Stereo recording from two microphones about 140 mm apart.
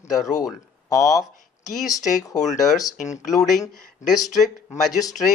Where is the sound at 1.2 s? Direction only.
Centre (ahead or behind).